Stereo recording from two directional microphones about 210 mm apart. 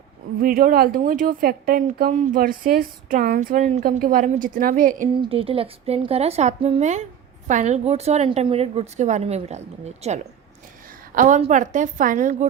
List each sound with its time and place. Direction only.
0.4 s speech: 45° right (ahead or behind)
5.1 s a woman's voice: 25° right (ahead or behind)